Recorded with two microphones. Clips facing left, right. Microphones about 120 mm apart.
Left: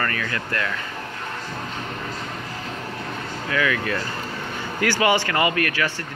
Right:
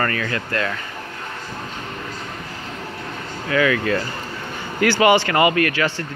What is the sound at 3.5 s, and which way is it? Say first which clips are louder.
Speech: right 5 dB; 25° right (ahead or behind).